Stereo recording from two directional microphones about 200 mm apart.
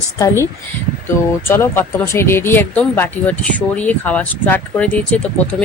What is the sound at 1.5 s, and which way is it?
Speech, 10° left (ahead or behind).